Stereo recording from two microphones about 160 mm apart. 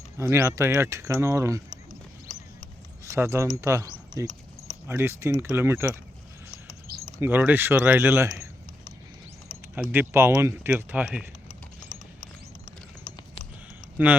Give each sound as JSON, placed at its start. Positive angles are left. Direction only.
{"t": 0.2, "sound": "speech", "side_deg": -15}
{"t": 3.0, "sound": "speech", "side_deg": -20}
{"t": 7.2, "sound": "speech", "side_deg": -15}
{"t": 9.9, "sound": "speech", "side_deg": -15}
{"t": 14.0, "sound": "speech", "side_deg": -10}